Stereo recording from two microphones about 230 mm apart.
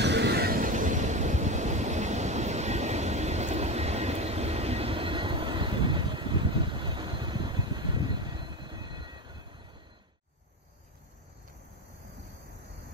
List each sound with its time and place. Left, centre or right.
0.0 s train: right; by 9.4 s centre